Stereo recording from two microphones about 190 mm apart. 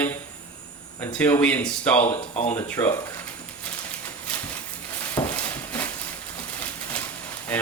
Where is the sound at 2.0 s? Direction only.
30° left (ahead or behind).